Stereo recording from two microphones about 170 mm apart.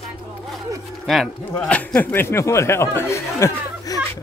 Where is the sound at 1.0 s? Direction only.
Centre (ahead or behind); by 4.0 s 15° left (ahead or behind).